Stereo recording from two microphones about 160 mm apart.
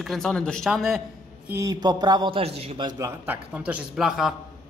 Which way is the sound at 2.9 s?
15° right (ahead or behind).